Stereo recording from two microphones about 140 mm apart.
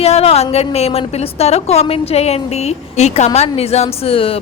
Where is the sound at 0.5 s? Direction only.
45° left (ahead or behind).